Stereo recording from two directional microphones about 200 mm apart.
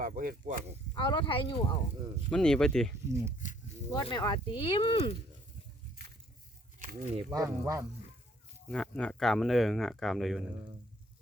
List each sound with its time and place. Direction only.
0.0 s speech: 40° right (ahead or behind)
0.9 s speech: 25° left (ahead or behind)
2.3 s speech: 5° left (ahead or behind)
3.1 s speech: 10° right (ahead or behind)
3.9 s speech: 20° left (ahead or behind)
6.7 s a sound: 40° right (ahead or behind)
7.3 s speech: 15° right (ahead or behind)
8.7 s speech: 5° left (ahead or behind)